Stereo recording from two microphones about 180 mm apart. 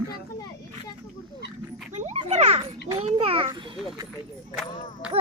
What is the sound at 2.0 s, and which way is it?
Children playing, 40° right (ahead or behind).